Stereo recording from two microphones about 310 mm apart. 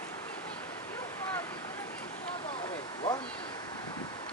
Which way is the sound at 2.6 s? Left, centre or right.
Centre.